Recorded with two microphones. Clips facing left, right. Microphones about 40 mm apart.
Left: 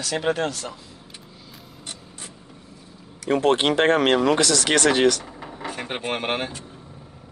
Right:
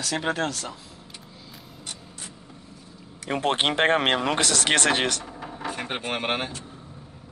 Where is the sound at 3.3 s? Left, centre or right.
Centre.